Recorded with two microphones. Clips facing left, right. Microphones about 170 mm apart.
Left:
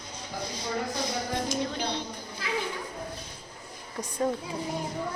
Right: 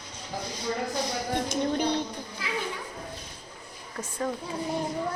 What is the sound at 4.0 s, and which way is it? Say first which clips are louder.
Speech: left 3 dB; 20° left (ahead or behind).